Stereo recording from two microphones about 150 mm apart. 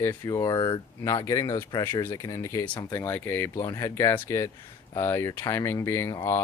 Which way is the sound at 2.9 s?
15° left (ahead or behind).